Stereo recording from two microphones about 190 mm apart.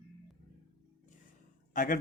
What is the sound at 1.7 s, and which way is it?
Speech, 45° left (ahead or behind).